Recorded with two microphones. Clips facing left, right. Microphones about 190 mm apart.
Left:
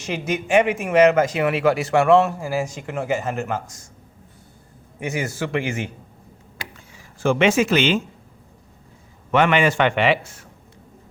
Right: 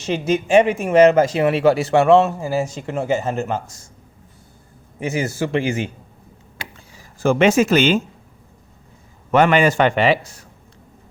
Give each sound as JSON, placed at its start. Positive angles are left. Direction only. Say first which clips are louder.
{"t": 0.0, "sound": "speech", "louder": "right 5 dB", "side_deg": -25}
{"t": 4.9, "sound": "speech", "louder": "right 4 dB", "side_deg": -30}
{"t": 6.9, "sound": "speech", "louder": "right 2 dB", "side_deg": -40}
{"t": 9.3, "sound": "a man's voice", "louder": "right 3 dB", "side_deg": -40}